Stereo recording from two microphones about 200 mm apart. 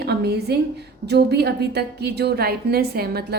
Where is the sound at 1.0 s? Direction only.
55° right (ahead or behind).